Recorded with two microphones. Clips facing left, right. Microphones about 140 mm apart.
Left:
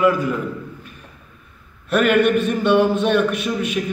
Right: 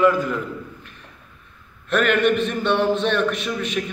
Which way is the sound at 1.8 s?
10° left (ahead or behind).